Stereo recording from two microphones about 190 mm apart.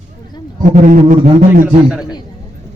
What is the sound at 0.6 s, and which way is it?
A man's voice, 40° right (ahead or behind).